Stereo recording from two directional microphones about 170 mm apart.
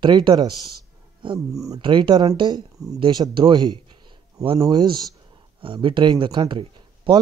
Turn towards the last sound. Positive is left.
turn(degrees=-30)  # may be behind; listen again after turning